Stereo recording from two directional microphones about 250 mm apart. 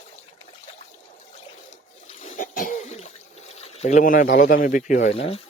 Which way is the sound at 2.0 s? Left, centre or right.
Left.